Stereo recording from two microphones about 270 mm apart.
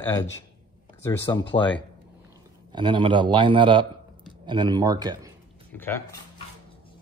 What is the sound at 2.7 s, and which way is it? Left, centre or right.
Speech, centre.